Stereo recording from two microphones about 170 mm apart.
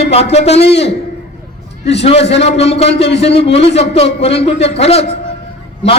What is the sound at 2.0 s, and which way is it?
Speech, 35° left (ahead or behind).